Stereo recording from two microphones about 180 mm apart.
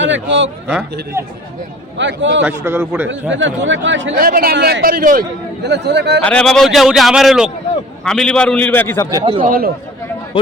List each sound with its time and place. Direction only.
0.0 s speech: 90° right
1.2 s a man's voice: 15° right (ahead or behind)
2.0 s speech: 90° right
2.4 s a man's voice: 10° right (ahead or behind)
3.3 s speech: 90° right
4.2 s a man's voice: 55° right (ahead or behind)
5.6 s speech: 70° right (ahead or behind)
6.2 s a man's voice: 5° left (ahead or behind)
9.0 s speech: 25° right (ahead or behind)
9.4 s speech: 55° right (ahead or behind)